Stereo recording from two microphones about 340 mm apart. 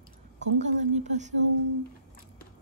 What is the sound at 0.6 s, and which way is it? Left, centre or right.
Speech, right.